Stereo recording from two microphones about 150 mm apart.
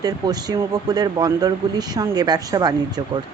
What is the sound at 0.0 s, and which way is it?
Speech, 25° right (ahead or behind).